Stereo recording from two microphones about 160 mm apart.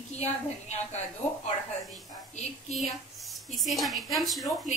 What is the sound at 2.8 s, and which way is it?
Speech, centre (ahead or behind).